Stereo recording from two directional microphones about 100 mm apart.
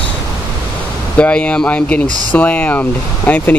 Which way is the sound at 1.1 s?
15° left (ahead or behind).